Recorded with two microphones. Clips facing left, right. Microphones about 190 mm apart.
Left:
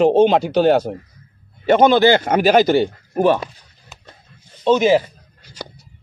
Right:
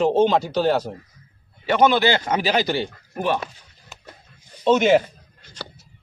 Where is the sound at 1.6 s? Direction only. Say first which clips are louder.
Left 5 dB; 45° left (ahead or behind).